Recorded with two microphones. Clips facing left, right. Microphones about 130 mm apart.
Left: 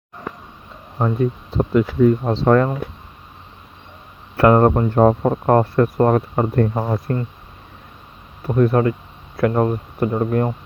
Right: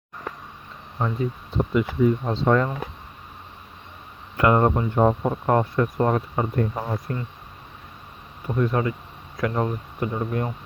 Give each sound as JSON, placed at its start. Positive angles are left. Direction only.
{"t": 0.9, "sound": "speech", "side_deg": 50}
{"t": 4.4, "sound": "speech", "side_deg": 55}
{"t": 8.5, "sound": "speech", "side_deg": 55}